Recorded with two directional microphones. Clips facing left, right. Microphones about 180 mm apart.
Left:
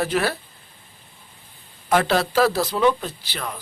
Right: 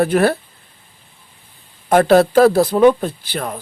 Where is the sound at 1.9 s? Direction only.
50° right (ahead or behind).